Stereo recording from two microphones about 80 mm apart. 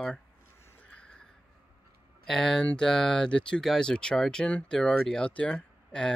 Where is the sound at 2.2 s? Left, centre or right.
Centre.